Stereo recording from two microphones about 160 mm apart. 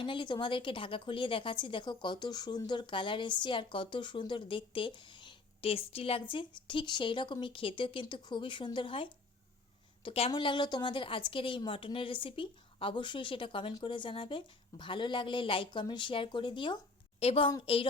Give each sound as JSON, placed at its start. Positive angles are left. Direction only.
{"t": 0.0, "sound": "speech", "side_deg": 30}